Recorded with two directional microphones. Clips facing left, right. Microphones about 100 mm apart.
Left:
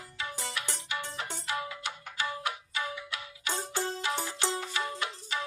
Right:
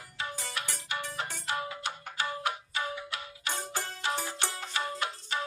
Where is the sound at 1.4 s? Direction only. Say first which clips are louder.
Right 1 dB; 40° right (ahead or behind).